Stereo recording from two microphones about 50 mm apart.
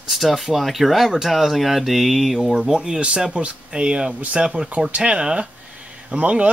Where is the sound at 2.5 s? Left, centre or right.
Centre.